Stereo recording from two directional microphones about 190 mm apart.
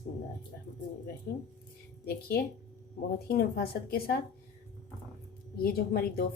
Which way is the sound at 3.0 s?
55° left (ahead or behind).